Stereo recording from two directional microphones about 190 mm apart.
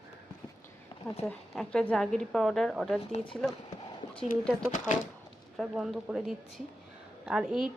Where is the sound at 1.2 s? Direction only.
5° left (ahead or behind).